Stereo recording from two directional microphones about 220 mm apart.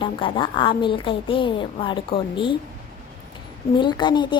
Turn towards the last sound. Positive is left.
turn(degrees=20)  # may be behind; listen again after turning